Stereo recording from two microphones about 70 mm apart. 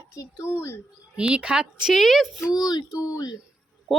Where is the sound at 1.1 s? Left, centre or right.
Centre.